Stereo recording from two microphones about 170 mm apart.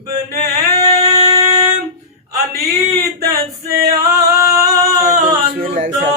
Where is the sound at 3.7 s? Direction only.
60° right (ahead or behind).